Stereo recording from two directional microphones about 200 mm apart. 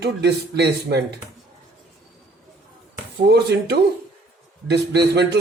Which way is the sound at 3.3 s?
55° right (ahead or behind).